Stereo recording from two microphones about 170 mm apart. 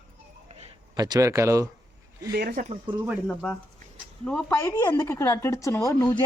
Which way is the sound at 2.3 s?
65° right (ahead or behind).